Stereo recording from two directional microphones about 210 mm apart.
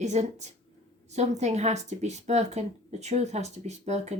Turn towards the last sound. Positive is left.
turn(degrees=-30)  # may be behind; listen again after turning